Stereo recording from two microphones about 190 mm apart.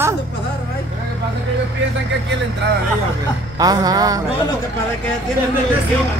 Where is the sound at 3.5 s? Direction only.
20° right (ahead or behind).